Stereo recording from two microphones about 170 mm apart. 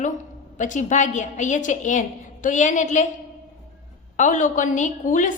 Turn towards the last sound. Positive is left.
turn(degrees=50)  # may be behind; listen again after turning